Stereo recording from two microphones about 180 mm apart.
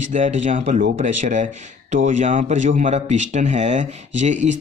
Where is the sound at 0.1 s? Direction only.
40° right (ahead or behind).